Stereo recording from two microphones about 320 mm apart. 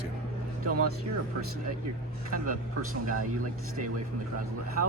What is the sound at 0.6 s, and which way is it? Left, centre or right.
Speech, right.